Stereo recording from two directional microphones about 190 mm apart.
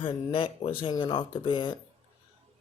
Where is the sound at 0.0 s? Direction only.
25° left (ahead or behind).